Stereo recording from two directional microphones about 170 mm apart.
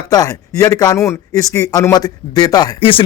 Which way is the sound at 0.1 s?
20° left (ahead or behind).